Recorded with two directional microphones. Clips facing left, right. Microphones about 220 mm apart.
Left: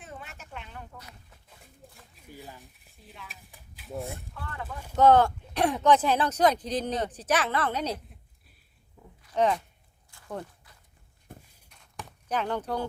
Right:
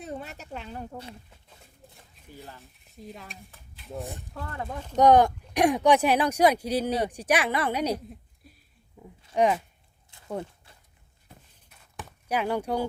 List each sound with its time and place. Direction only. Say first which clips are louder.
0.0 s speech: right 8 dB; 40° right (ahead or behind)
2.1 s speech: even; 5° left (ahead or behind)
3.0 s stir: right 8 dB; 40° right (ahead or behind)
3.5 s a sound: left 2 dB; centre (ahead or behind)
4.9 s speech: right 1 dB; 15° right (ahead or behind)
9.3 s speech: right 2 dB; 10° right (ahead or behind)
10.1 s walk: right 3 dB; 20° right (ahead or behind)
10.7 s a sound: right 2 dB; 30° right (ahead or behind)
11.3 s walk: left 5 dB; 50° left (ahead or behind)
11.7 s walk: right 1 dB; 5° right (ahead or behind)